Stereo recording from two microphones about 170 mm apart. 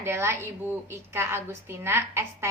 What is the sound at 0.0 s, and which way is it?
A woman's voice, 15° right (ahead or behind).